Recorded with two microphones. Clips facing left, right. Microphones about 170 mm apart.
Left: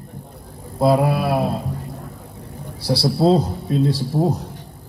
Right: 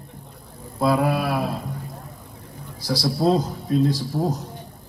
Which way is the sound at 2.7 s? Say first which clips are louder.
Left 4 dB; 65° left (ahead or behind).